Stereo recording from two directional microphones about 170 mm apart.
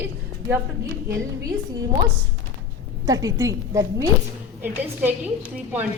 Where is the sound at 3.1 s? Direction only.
20° right (ahead or behind).